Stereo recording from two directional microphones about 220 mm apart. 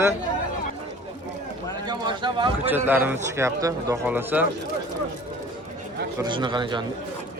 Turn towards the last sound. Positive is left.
turn(degrees=-20)  # may be behind; listen again after turning